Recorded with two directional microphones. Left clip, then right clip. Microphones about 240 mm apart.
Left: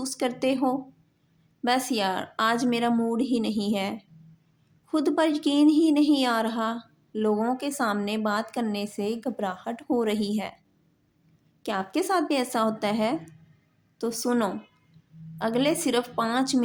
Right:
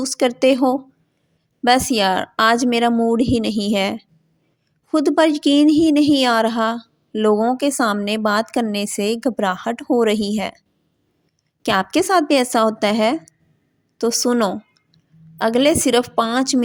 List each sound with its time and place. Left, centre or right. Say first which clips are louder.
0.0 s a woman's voice: right 11 dB; right
11.6 s a woman's voice: right 10 dB; right